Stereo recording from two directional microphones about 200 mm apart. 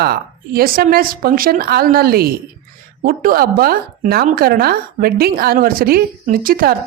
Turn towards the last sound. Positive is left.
turn(degrees=-45)  # may be behind; listen again after turning